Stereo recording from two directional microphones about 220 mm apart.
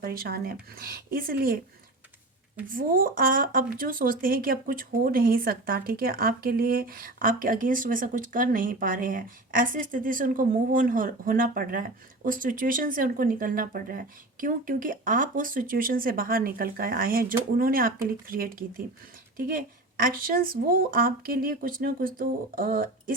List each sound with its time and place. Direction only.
0.0 s speech: 45° right (ahead or behind)
2.6 s speech: 40° right (ahead or behind)